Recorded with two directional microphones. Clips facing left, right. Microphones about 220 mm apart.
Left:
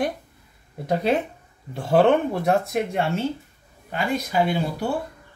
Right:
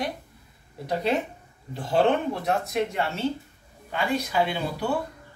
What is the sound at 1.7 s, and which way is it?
Speech, 55° left (ahead or behind).